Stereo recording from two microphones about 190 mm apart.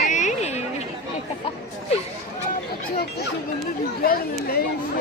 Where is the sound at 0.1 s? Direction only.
40° left (ahead or behind).